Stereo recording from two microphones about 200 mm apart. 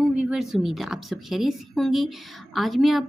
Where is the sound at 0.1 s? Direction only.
5° right (ahead or behind).